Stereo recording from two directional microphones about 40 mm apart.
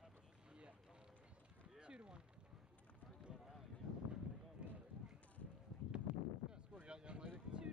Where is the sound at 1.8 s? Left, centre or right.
Right.